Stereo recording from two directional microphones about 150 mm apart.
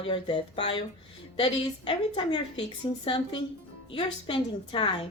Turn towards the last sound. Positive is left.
turn(degrees=35)  # may be behind; listen again after turning